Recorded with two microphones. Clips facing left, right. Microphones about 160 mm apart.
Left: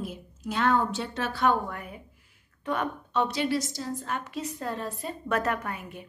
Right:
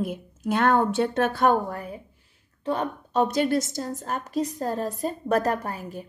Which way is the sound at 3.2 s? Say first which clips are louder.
Right 5 dB; 45° right (ahead or behind).